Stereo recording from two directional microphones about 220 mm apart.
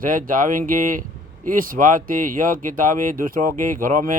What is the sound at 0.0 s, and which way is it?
Speech, 40° right (ahead or behind).